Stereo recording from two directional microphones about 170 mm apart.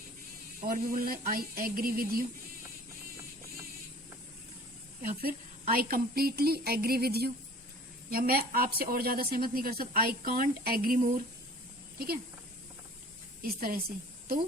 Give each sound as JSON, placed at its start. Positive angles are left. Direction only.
{"t": 0.7, "sound": "speech", "side_deg": -60}
{"t": 5.0, "sound": "speech", "side_deg": -60}
{"t": 13.4, "sound": "speech", "side_deg": -60}